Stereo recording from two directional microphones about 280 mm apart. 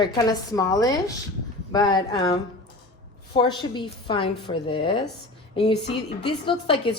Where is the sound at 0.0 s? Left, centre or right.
Centre.